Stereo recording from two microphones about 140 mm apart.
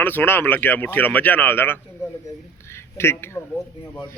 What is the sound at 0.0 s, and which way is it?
A man's voice, 15° left (ahead or behind).